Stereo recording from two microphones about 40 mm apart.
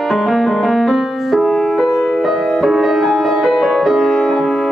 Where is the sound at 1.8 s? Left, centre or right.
Centre.